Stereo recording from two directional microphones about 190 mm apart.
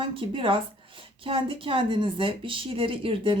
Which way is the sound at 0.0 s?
25° right (ahead or behind).